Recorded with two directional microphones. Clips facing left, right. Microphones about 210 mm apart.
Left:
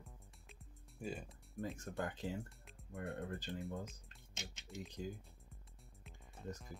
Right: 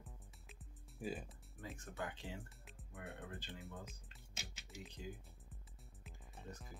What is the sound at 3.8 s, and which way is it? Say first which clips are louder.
Speech: left 5 dB; centre (ahead or behind).